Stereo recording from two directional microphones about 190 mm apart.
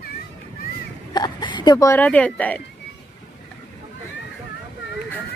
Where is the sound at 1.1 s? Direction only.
20° left (ahead or behind).